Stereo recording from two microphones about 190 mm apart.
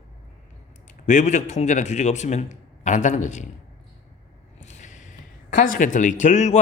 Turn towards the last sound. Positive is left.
turn(degrees=40)  # may be behind; listen again after turning